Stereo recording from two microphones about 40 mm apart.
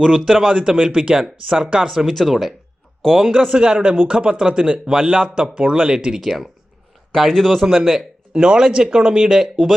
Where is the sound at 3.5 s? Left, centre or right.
Right.